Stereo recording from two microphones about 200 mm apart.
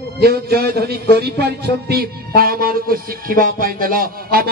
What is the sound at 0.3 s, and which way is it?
Music, 50° right (ahead or behind).